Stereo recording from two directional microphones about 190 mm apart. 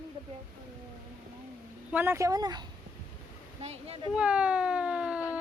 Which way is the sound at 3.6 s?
35° right (ahead or behind).